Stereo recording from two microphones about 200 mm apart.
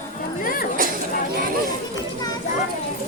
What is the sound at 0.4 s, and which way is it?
Chatter, 45° left (ahead or behind).